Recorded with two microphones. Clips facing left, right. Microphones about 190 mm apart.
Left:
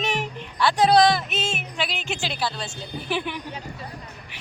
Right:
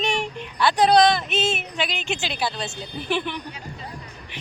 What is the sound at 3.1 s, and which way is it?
Speech, 5° left (ahead or behind).